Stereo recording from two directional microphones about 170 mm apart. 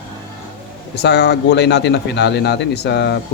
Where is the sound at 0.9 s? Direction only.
85° left.